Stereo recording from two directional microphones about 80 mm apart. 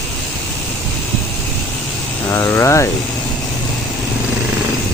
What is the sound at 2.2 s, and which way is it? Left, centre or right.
Speech, left.